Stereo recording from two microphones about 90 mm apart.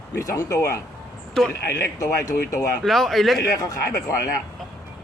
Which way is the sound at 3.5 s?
40° left (ahead or behind).